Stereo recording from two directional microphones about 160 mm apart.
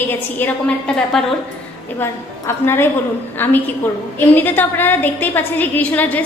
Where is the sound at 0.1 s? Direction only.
10° left (ahead or behind).